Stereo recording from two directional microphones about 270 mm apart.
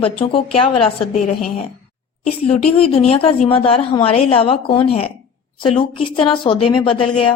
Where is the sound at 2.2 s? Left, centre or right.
Left.